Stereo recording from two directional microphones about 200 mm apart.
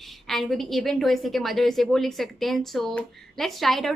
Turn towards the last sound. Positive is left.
turn(degrees=0)  # may be behind; listen again after turning